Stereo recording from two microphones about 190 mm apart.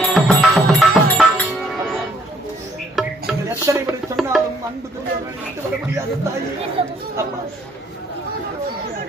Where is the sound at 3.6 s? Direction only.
15° right (ahead or behind).